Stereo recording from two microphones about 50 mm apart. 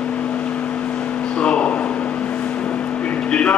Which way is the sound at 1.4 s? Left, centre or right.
Left.